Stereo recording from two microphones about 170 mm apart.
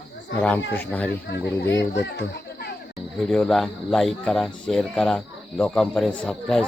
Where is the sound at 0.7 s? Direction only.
10° left (ahead or behind).